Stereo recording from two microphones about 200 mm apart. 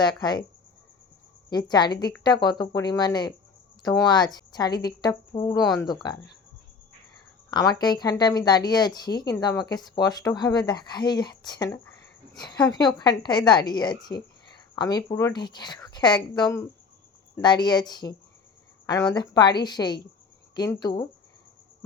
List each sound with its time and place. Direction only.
0.0 s speech: 20° left (ahead or behind)
1.5 s speech: 20° left (ahead or behind)
7.5 s speech: 20° left (ahead or behind)
19.1 s speech: 20° left (ahead or behind)